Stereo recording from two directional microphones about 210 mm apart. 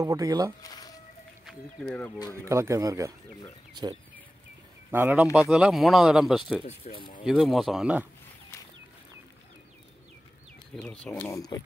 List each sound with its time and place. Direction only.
0.0 s speech: 15° right (ahead or behind)
0.6 s a sound: 20° left (ahead or behind)
1.4 s speech: centre (ahead or behind)
2.4 s speech: 15° right (ahead or behind)
4.9 s speech: 10° right (ahead or behind)
6.6 s speech: 25° left (ahead or behind)
7.2 s speech: centre (ahead or behind)
10.8 s speech: 5° left (ahead or behind)